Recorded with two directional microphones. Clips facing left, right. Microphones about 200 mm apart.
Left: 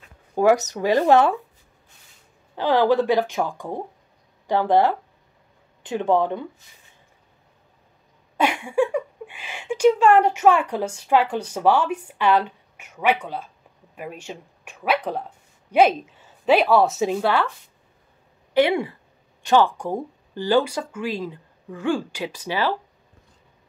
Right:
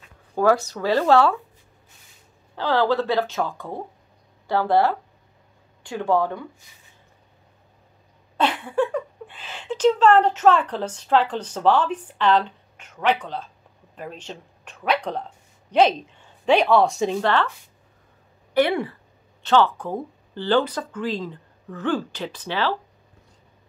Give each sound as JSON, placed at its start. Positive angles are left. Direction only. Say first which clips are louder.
{"t": 0.3, "sound": "speech", "louder": "left 2 dB", "side_deg": 15}
{"t": 2.5, "sound": "speech", "louder": "left 3 dB", "side_deg": 15}
{"t": 8.4, "sound": "speech", "louder": "left 1 dB", "side_deg": 10}
{"t": 18.5, "sound": "speech", "louder": "left 1 dB", "side_deg": 10}